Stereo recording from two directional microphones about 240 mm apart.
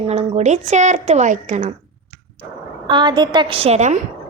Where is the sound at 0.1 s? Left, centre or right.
Right.